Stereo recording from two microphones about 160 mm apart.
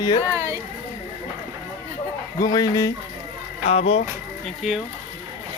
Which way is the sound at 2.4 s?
25° left (ahead or behind).